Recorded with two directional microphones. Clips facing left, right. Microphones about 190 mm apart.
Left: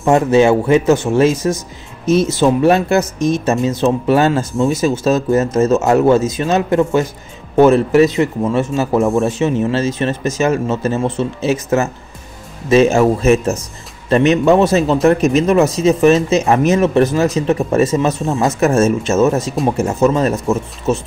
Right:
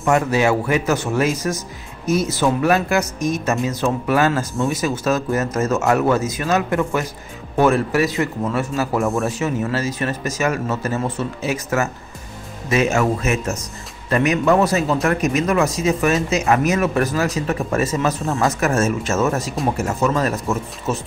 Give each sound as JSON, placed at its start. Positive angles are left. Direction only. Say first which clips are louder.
{"t": 0.0, "sound": "speech", "louder": "left 6 dB", "side_deg": 25}